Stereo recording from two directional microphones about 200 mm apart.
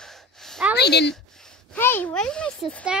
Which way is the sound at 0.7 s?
55° left (ahead or behind).